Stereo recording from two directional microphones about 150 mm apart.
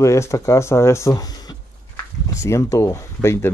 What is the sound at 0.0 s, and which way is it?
Speech, 20° left (ahead or behind).